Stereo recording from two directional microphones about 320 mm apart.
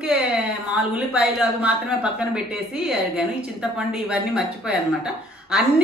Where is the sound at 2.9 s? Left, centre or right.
Centre.